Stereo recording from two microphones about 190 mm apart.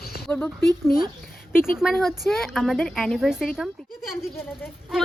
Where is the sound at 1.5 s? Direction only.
50° left (ahead or behind).